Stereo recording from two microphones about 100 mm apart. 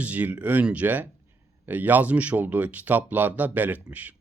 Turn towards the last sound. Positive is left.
turn(degrees=-15)  # may be behind; listen again after turning